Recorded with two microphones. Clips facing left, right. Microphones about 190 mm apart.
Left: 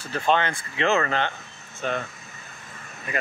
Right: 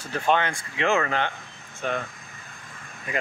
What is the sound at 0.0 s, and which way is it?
Speech, 15° right (ahead or behind).